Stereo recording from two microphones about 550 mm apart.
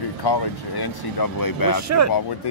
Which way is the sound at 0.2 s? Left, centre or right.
Left.